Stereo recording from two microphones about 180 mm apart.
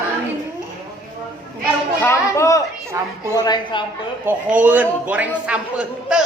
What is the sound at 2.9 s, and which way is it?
Speech, 15° right (ahead or behind).